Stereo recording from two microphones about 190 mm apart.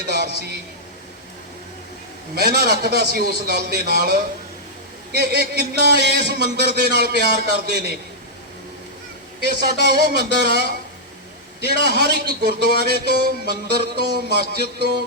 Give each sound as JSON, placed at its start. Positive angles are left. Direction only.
{"t": 0.1, "sound": "a sound", "side_deg": -55}
{"t": 2.3, "sound": "a man's voice", "side_deg": -55}
{"t": 9.4, "sound": "a man's voice", "side_deg": -55}